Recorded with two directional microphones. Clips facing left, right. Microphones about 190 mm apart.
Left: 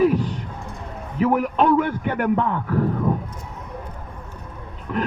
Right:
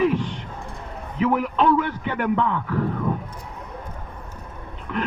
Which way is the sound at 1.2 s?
45° left (ahead or behind).